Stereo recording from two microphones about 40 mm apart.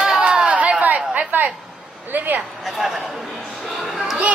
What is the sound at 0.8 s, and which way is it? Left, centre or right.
Chatter, right.